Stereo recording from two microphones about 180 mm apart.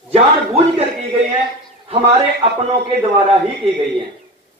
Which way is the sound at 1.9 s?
30° right (ahead or behind).